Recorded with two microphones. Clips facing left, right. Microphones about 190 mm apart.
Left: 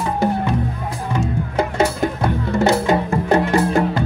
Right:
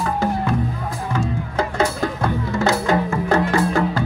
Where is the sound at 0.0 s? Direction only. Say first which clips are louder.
Left 2 dB; 20° left (ahead or behind).